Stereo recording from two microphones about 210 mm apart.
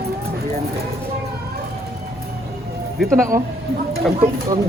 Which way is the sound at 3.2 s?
15° right (ahead or behind).